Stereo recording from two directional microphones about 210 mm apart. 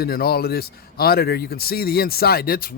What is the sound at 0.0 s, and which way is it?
Speech, 45° left (ahead or behind).